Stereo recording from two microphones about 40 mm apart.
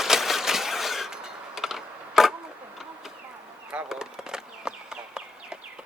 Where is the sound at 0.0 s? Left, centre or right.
Centre.